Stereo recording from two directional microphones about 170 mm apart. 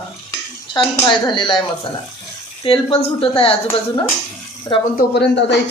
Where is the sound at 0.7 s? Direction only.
30° left (ahead or behind).